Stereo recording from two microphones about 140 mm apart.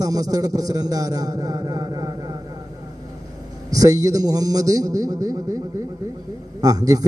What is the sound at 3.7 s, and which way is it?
A man's voice, 25° right (ahead or behind).